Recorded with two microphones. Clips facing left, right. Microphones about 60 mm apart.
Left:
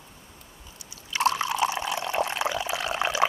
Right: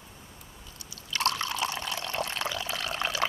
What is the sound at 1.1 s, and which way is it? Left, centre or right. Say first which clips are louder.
Liquid: left 5 dB; centre.